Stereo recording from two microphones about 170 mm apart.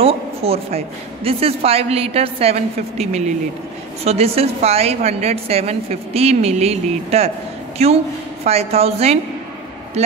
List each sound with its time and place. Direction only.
0.0 s a man's voice: 35° right (ahead or behind)